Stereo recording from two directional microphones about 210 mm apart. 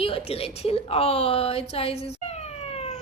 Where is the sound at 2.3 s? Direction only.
30° left (ahead or behind).